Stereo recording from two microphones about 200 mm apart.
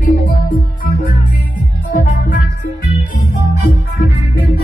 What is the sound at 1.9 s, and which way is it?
Music, 40° left (ahead or behind).